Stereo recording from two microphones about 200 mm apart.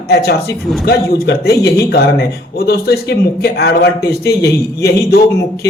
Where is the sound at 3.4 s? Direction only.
55° left (ahead or behind).